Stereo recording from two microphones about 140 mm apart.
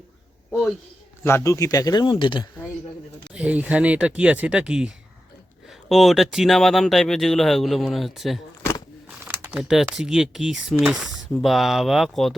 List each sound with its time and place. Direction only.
1.2 s speech: 20° left (ahead or behind); by 2.5 s 35° left (ahead or behind)
3.3 s speech: 10° right (ahead or behind)
9.5 s speech: 5° right (ahead or behind)